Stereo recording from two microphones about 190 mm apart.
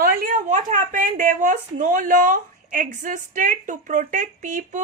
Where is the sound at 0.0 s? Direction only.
50° right (ahead or behind).